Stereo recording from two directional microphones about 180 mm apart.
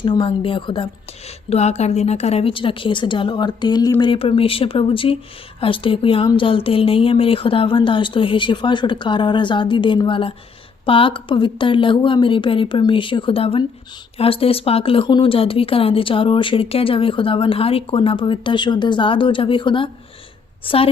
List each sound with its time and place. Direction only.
0.0 s a woman's voice: 25° left (ahead or behind)